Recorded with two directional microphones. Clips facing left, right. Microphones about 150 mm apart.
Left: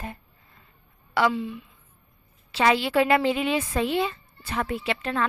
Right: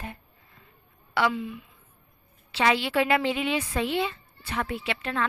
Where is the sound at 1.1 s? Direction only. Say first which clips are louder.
Left 2 dB; 35° left (ahead or behind).